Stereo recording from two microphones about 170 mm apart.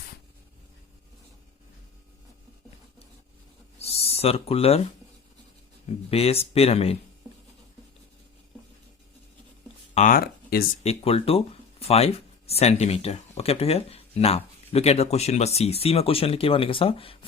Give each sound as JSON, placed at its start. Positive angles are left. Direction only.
{"t": 3.8, "sound": "a sound", "side_deg": 35}
{"t": 6.1, "sound": "speech", "side_deg": 35}
{"t": 9.9, "sound": "speech", "side_deg": 50}
{"t": 10.8, "sound": "speech", "side_deg": 35}